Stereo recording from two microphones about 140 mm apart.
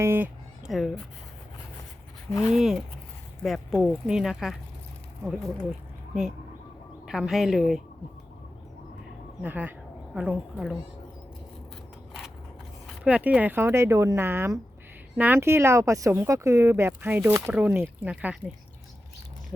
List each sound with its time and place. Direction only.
0.0 s speech: 15° right (ahead or behind)
0.7 s speech: centre (ahead or behind)
2.5 s speech: centre (ahead or behind)
7.0 s speech: 5° right (ahead or behind)
9.4 s speech: 15° right (ahead or behind)
13.1 s speech: 10° right (ahead or behind)